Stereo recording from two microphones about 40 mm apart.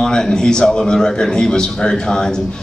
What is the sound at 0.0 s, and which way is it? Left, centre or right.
A man's voice, centre.